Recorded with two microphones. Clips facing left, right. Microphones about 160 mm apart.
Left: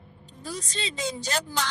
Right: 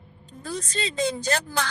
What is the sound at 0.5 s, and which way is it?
Speech, 55° right (ahead or behind).